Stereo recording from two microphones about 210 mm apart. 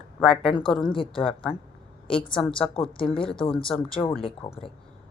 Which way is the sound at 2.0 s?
5° left (ahead or behind).